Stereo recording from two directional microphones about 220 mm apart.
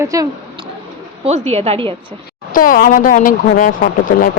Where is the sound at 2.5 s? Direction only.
40° left (ahead or behind).